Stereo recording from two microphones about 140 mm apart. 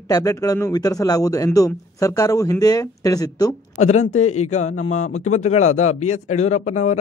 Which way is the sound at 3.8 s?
55° left (ahead or behind).